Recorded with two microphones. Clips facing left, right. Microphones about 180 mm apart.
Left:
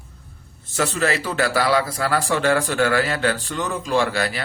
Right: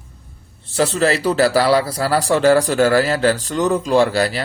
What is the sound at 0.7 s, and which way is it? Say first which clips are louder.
A man's voice: right 5 dB; 35° right (ahead or behind).